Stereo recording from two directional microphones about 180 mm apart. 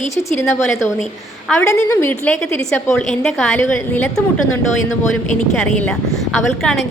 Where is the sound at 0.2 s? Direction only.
15° left (ahead or behind).